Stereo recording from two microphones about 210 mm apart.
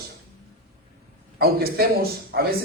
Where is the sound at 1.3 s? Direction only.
50° right (ahead or behind).